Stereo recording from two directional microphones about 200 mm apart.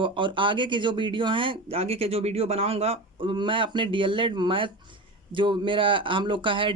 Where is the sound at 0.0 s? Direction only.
25° right (ahead or behind).